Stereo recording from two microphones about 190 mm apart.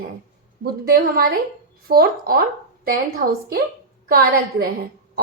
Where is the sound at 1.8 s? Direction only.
50° right (ahead or behind).